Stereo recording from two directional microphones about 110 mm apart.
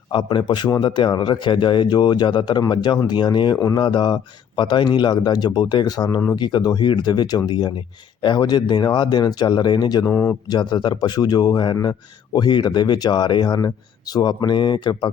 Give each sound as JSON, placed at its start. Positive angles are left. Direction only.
{"t": 0.1, "sound": "a man's voice", "side_deg": 45}
{"t": 10.1, "sound": "speech", "side_deg": 15}
{"t": 10.5, "sound": "a man's voice", "side_deg": 40}